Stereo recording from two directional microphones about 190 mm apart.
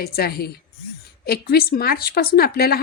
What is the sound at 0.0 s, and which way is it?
A woman's voice, 55° left (ahead or behind).